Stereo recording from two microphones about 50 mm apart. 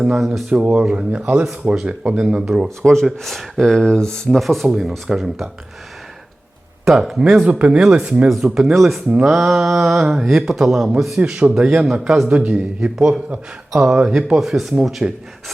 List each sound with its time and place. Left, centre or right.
0.0 s speech: centre
0.8 s speech: right
1.7 s speech: centre
2.6 s speech: centre
4.4 s speech: centre
6.8 s speech: centre; by 8.3 s right
8.4 s speech: centre
12.3 s speech: right